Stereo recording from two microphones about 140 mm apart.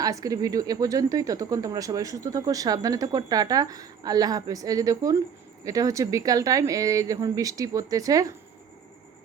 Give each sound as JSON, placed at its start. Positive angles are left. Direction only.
{"t": 0.0, "sound": "speech", "side_deg": -25}